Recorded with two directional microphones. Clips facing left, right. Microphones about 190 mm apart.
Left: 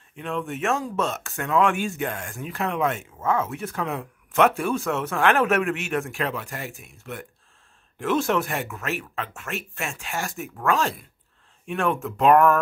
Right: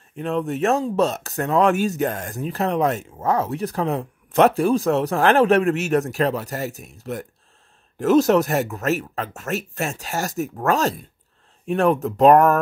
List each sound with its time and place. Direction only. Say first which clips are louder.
0.1 s speech: right 6 dB; 40° right (ahead or behind)